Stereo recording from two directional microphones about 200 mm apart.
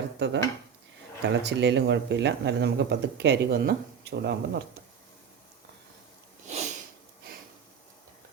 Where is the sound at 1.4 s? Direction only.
60° right (ahead or behind).